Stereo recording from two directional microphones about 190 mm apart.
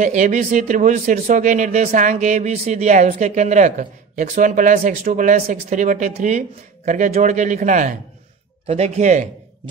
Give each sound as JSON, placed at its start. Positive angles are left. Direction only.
{"t": 0.0, "sound": "speech", "side_deg": -40}